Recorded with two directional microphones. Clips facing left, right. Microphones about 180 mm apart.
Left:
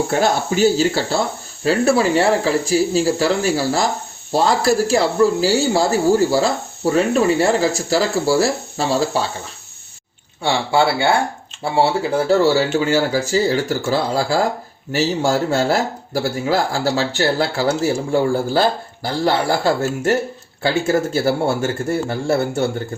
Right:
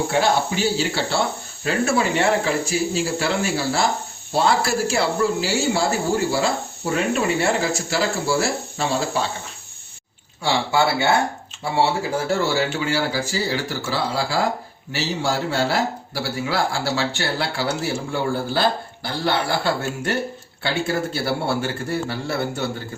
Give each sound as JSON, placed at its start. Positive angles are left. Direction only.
{"t": 0.1, "sound": "speech", "side_deg": 45}
{"t": 10.4, "sound": "speech", "side_deg": 30}
{"t": 12.3, "sound": "speech", "side_deg": 35}